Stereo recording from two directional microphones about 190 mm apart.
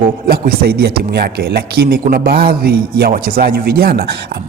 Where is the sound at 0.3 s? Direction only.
55° right (ahead or behind).